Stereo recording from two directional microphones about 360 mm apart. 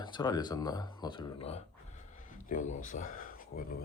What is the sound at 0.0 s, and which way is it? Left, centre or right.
Speech, centre.